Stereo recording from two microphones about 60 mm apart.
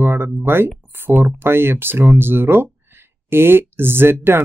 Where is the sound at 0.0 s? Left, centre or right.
Right.